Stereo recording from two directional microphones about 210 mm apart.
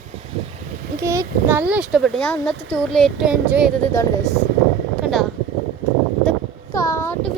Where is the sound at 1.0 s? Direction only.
15° right (ahead or behind).